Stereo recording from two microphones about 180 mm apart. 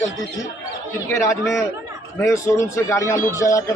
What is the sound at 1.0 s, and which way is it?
A man's voice, 15° left (ahead or behind).